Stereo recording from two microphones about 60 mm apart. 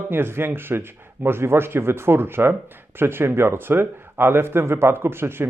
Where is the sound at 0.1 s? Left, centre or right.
Right.